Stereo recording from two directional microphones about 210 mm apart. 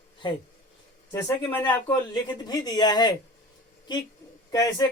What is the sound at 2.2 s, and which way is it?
Speech, 20° left (ahead or behind).